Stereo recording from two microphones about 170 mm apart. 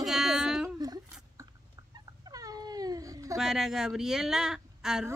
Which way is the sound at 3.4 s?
5° right (ahead or behind).